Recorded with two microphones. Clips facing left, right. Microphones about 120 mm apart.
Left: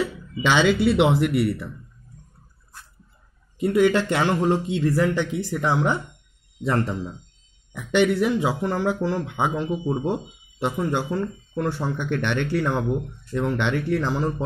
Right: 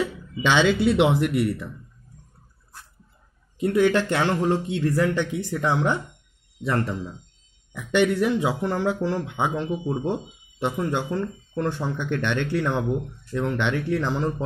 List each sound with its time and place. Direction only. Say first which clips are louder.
0.0 s a sound: even; 10° left (ahead or behind)
1.2 s speech: left 1 dB; 5° left (ahead or behind)
3.6 s speech: left 1 dB; 10° left (ahead or behind)
6.6 s speech: left 1 dB; 25° left (ahead or behind)
7.7 s speech: left 1 dB; 15° left (ahead or behind)